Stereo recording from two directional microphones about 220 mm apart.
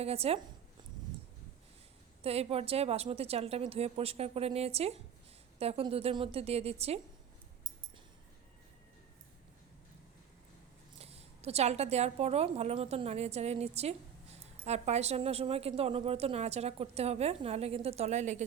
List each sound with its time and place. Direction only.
0.0 s a woman's voice: 25° right (ahead or behind)
2.2 s a woman's voice: 25° right (ahead or behind)
10.9 s a woman's voice: 30° right (ahead or behind)